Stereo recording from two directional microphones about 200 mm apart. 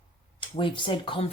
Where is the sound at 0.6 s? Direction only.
25° left (ahead or behind).